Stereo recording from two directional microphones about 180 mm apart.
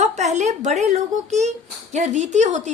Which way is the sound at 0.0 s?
40° right (ahead or behind).